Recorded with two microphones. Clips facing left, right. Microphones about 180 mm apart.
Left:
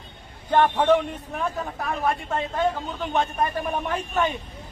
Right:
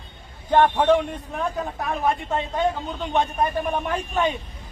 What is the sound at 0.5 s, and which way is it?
Speech, 10° right (ahead or behind).